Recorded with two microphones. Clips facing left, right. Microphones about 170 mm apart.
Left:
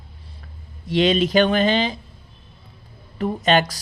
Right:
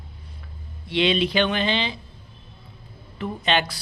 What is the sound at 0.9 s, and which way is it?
Speech, 45° left (ahead or behind).